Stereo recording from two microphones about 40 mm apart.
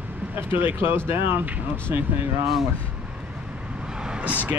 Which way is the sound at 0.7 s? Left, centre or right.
Right.